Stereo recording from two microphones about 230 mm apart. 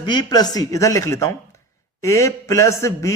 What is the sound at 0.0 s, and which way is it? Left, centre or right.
Speech, centre.